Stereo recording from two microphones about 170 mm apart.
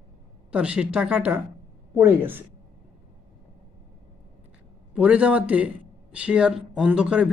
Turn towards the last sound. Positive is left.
turn(degrees=-5)  # may be behind; listen again after turning